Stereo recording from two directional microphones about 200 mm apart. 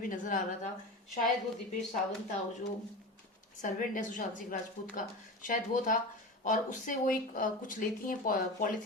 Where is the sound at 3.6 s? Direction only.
40° left (ahead or behind).